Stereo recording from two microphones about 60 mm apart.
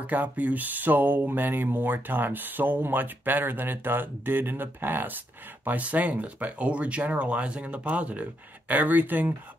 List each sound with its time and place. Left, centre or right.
0.0 s speech: right